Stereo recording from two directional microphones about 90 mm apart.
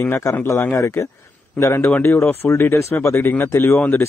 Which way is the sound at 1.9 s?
20° left (ahead or behind).